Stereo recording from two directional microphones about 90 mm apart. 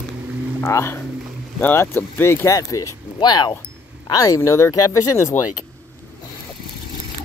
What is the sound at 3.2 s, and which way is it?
Speech, 50° left (ahead or behind).